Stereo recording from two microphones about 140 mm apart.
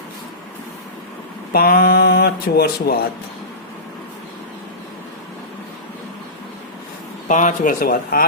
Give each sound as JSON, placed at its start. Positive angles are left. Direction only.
{"t": 1.5, "sound": "speech", "side_deg": 90}
{"t": 7.3, "sound": "speech", "side_deg": 65}